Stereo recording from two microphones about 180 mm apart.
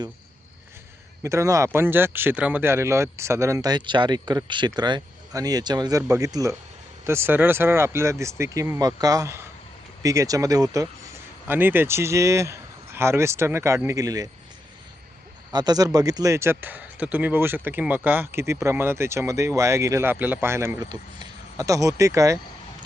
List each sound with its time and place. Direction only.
1.2 s speech: 15° right (ahead or behind)
15.5 s speech: 20° right (ahead or behind)